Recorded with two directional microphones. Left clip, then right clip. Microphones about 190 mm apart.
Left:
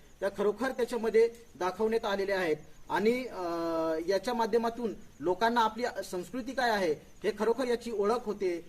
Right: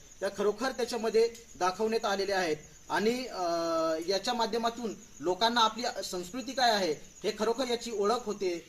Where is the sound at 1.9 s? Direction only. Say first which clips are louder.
Even; 35° left (ahead or behind).